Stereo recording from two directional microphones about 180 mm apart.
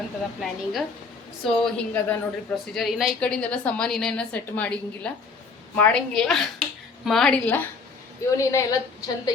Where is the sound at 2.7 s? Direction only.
Centre (ahead or behind).